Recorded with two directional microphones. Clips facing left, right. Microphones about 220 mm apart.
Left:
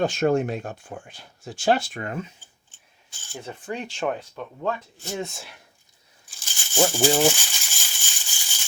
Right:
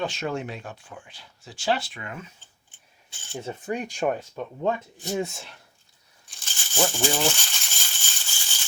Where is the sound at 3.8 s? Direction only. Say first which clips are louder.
Even; 10° right (ahead or behind).